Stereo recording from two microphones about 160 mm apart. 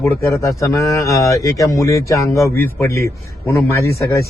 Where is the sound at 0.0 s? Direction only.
15° left (ahead or behind).